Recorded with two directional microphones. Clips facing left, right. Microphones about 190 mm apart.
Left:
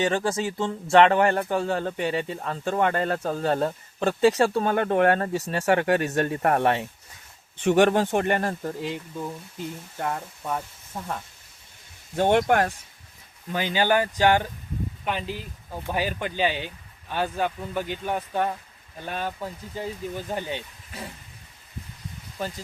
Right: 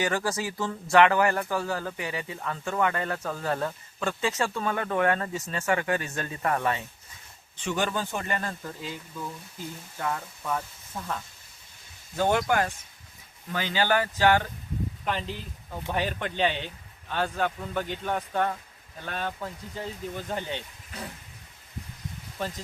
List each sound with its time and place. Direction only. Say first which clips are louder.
0.0 s speech: left 4 dB; 25° left (ahead or behind); by 5.3 s 45° left (ahead or behind)
5.7 s speech: left 6 dB; 60° left (ahead or behind)
10.0 s speech: left 2 dB; 35° left (ahead or behind)
12.4 s speech: left 4 dB; 60° left (ahead or behind)
13.5 s speech: left 3 dB; 15° left (ahead or behind)
15.0 s speech: left 3 dB; 5° left (ahead or behind)
22.4 s speech: left 1 dB; centre (ahead or behind)